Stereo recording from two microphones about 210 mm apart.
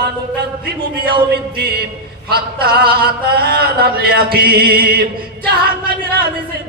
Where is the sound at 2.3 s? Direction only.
50° right (ahead or behind).